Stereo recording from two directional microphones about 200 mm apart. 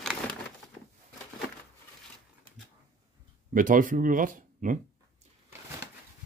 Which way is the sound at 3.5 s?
40° right (ahead or behind).